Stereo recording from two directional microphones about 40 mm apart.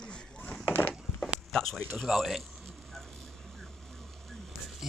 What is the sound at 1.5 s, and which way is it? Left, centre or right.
Speech, centre.